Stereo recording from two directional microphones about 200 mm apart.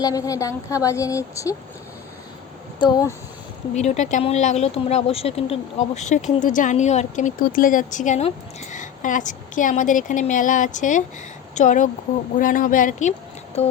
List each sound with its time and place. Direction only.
0.0 s speech: 15° left (ahead or behind)
2.7 s speech: 20° left (ahead or behind)
3.8 s a woman's voice: 35° left (ahead or behind)